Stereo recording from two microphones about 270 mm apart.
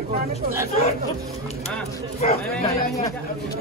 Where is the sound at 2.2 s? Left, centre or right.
Left.